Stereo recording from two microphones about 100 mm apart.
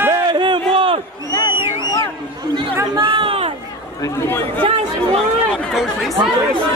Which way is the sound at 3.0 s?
60° right (ahead or behind).